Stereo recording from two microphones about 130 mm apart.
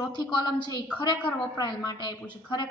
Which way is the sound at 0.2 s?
35° left (ahead or behind).